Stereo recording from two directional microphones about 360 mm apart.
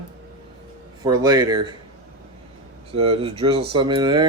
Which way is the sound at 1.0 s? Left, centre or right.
Centre.